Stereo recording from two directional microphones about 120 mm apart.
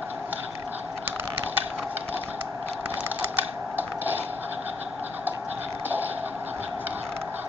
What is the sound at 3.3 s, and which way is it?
Mechanisms, 15° right (ahead or behind).